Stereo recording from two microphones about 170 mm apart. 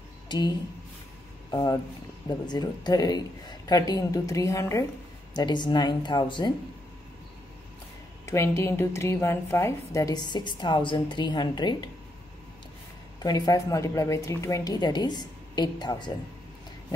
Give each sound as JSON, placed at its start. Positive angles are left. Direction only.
{"t": 0.3, "sound": "a woman's voice", "side_deg": 25}
{"t": 8.3, "sound": "a woman's voice", "side_deg": 15}
{"t": 13.2, "sound": "a woman's voice", "side_deg": 20}